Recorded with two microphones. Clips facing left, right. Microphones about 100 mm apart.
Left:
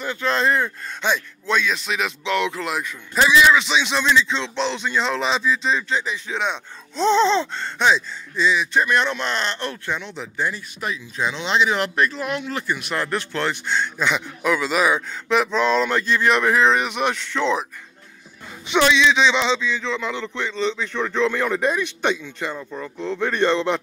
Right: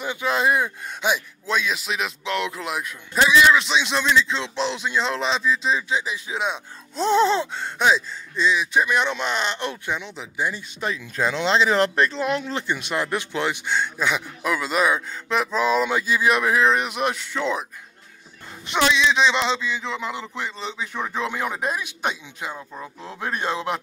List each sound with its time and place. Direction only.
0.0 s a man's voice: 15° right (ahead or behind)
10.5 s speech: 30° right (ahead or behind)
11.1 s speech: 45° right (ahead or behind); by 17.6 s 5° right (ahead or behind)
18.7 s a man's voice: 5° right (ahead or behind)